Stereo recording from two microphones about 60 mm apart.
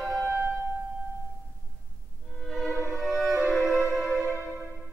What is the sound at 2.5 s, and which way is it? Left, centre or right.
Violin, centre.